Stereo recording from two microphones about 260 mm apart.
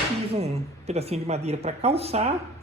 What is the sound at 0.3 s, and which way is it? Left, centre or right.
A man's voice, right.